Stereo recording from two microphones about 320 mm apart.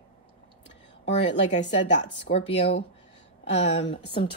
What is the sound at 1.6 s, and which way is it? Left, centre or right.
Speech, left.